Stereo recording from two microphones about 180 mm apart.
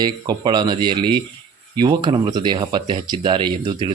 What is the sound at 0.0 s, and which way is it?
A man's voice, 20° right (ahead or behind).